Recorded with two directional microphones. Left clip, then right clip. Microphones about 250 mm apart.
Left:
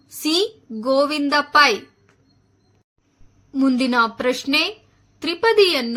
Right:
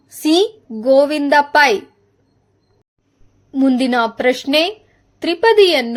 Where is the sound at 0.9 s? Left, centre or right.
Centre.